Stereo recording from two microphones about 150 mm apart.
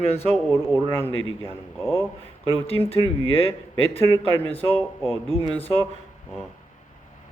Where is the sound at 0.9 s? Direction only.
15° left (ahead or behind).